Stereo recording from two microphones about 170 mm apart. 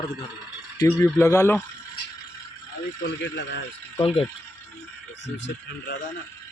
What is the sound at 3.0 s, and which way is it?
Speech, 90° left.